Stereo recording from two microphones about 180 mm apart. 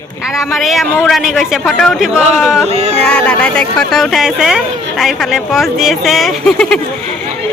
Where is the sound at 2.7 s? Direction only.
35° right (ahead or behind).